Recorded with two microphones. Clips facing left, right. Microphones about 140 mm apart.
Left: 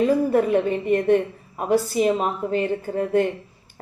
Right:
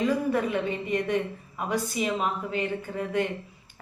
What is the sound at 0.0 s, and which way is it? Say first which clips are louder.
Speech: left 7 dB; 40° left (ahead or behind).